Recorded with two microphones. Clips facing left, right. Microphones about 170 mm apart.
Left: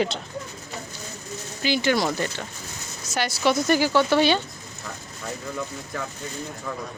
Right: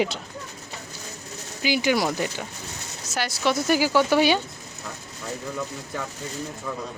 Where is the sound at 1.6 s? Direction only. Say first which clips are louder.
Even; 10° right (ahead or behind).